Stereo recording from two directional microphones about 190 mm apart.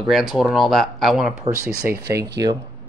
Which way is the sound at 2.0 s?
15° right (ahead or behind).